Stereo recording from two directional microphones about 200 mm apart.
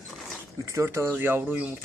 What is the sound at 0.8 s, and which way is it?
Speech, 15° right (ahead or behind).